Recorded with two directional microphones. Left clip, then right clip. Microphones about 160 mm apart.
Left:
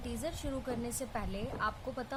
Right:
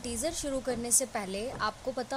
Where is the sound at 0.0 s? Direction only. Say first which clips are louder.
Right 6 dB; 25° right (ahead or behind).